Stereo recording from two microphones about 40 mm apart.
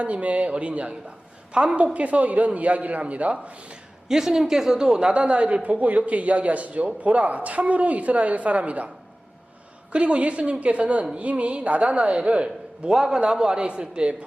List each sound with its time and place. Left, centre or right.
0.0 s a man's voice: right
4.1 s speech: centre
5.1 s a man's voice: right
9.9 s a man's voice: right
12.9 s speech: centre
13.1 s a man's voice: right